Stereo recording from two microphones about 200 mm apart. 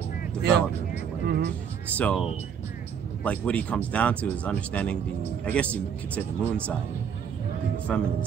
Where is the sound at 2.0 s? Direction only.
5° left (ahead or behind).